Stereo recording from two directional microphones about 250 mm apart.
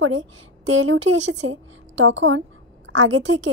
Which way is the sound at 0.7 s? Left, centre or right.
Right.